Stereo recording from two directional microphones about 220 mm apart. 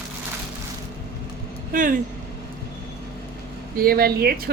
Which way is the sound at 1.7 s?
40° right (ahead or behind).